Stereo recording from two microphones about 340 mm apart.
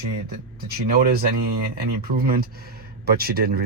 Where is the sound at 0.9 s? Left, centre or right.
Right.